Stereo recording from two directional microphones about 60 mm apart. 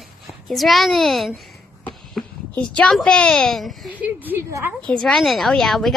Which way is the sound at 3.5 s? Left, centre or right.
Centre.